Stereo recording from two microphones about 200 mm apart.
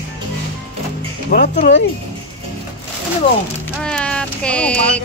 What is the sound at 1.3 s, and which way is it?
Speech, 40° left (ahead or behind).